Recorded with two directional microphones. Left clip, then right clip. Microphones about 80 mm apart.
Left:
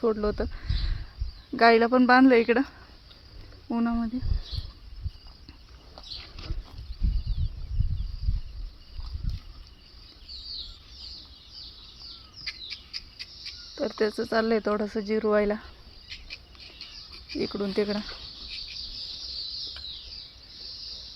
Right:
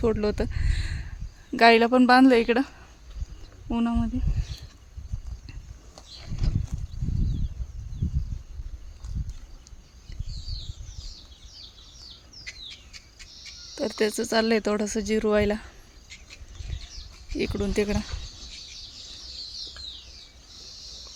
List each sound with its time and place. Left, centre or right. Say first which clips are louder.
0.0 s speech: right 1 dB; right
1.5 s speech: right 2 dB; right
2.0 s speech: even; centre
13.7 s speech: right 1 dB; right
17.3 s speech: right 1 dB; right